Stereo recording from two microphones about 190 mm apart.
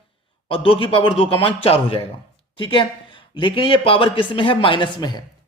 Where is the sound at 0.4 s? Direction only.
30° left (ahead or behind).